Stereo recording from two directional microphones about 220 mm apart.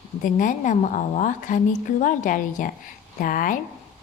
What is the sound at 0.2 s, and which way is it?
A woman's voice, 35° left (ahead or behind).